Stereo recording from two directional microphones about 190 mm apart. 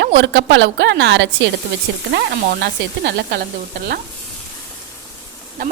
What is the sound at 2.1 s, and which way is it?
A woman's voice, 60° right (ahead or behind).